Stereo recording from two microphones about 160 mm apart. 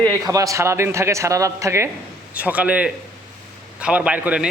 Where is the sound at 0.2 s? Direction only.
20° right (ahead or behind).